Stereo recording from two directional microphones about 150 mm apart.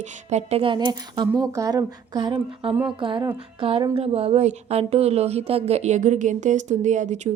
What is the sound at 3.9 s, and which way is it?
Speech, 40° right (ahead or behind).